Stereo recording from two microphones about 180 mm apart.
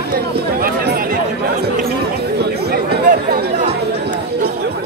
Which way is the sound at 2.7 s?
60° right (ahead or behind).